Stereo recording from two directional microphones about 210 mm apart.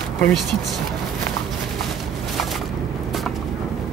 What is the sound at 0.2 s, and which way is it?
Speech, centre (ahead or behind).